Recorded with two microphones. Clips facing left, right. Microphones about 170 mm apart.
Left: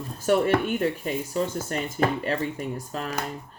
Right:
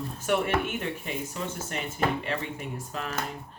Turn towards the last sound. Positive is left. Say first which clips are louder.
# left 4 dB
turn(degrees=40)  # may be behind; listen again after turning